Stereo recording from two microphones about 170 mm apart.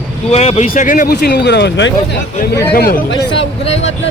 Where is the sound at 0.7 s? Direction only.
50° left (ahead or behind).